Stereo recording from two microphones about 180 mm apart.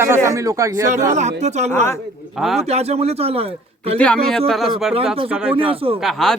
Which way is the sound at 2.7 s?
35° right (ahead or behind).